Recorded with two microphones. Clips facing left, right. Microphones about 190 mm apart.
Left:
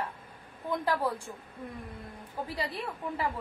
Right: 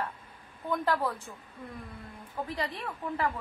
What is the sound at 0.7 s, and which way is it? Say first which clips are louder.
Speech: even; 10° left (ahead or behind).